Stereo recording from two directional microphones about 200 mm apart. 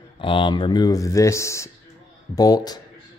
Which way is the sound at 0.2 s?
25° left (ahead or behind).